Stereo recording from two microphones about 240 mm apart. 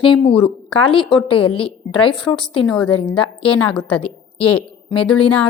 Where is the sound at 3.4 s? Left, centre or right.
Centre.